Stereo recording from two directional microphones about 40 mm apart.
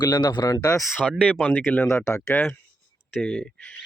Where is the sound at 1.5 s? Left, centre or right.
Left.